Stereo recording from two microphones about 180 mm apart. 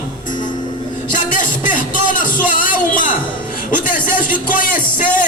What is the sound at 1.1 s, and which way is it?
Music, 45° left (ahead or behind).